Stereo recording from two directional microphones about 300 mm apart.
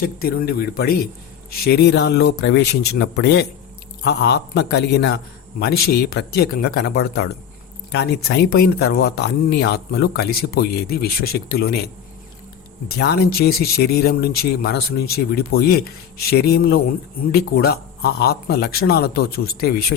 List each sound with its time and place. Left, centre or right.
0.0 s speech: left
12.9 s speech: left